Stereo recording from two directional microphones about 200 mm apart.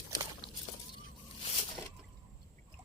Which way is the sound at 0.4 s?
20° right (ahead or behind).